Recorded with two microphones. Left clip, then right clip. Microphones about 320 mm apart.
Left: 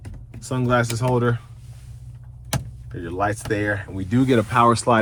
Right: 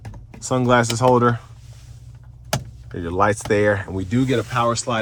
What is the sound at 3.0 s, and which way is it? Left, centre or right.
Speech, centre.